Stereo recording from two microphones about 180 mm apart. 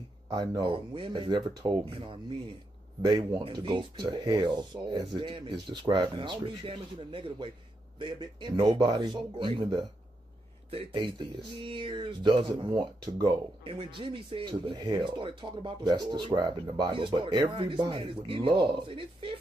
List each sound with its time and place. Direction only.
0.3 s speech: 25° right (ahead or behind)